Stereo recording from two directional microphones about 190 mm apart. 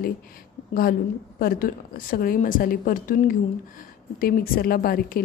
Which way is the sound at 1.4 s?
50° left (ahead or behind).